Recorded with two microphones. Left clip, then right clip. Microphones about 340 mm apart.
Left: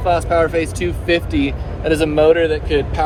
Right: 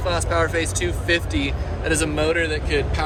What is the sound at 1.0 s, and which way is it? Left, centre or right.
Speech, centre.